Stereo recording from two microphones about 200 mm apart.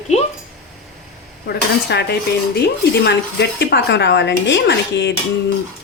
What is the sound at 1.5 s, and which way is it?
Speech, 55° left (ahead or behind).